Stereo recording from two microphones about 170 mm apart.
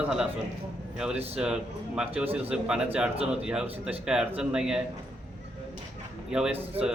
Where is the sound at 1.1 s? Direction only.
35° right (ahead or behind).